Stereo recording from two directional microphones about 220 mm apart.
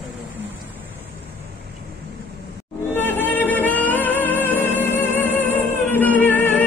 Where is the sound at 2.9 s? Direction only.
10° left (ahead or behind).